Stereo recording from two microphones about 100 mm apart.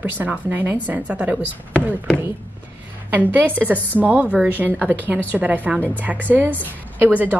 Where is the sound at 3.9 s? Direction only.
15° right (ahead or behind).